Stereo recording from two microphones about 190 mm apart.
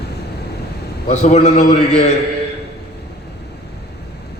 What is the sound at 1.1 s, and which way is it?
A man's voice, 35° left (ahead or behind).